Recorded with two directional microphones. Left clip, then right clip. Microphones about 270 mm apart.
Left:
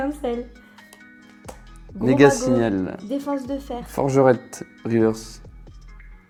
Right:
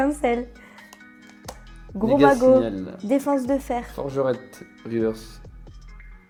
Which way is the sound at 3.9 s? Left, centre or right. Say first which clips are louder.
Left 10 dB; left.